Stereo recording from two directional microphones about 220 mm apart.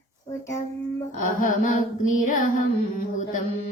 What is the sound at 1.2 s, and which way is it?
Mantra, 40° left (ahead or behind).